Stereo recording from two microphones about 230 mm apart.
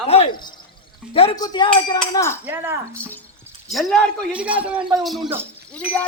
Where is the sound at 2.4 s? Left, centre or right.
Centre.